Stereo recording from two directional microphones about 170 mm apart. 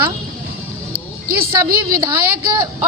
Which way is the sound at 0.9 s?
60° right (ahead or behind).